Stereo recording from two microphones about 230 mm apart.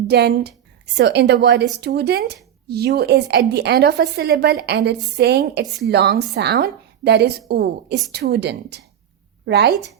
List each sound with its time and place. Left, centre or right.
0.1 s speech: right